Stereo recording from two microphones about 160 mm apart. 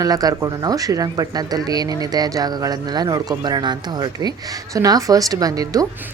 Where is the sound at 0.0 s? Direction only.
25° right (ahead or behind).